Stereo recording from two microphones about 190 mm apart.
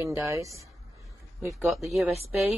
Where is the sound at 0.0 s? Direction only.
15° right (ahead or behind).